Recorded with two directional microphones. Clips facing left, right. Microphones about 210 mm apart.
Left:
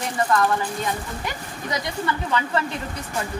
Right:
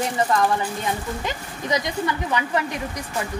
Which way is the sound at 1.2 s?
20° right (ahead or behind).